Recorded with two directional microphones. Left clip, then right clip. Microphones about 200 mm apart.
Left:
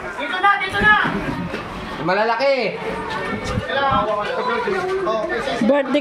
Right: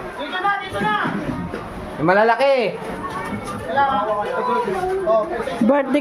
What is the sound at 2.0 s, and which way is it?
Speech, 50° right (ahead or behind).